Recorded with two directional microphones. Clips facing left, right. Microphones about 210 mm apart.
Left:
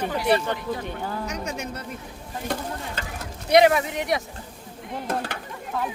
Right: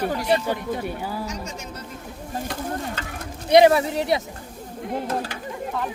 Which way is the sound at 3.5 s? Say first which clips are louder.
Right 3 dB; 30° right (ahead or behind).